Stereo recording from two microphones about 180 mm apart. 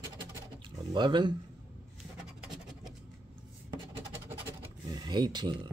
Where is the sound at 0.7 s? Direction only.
25° right (ahead or behind).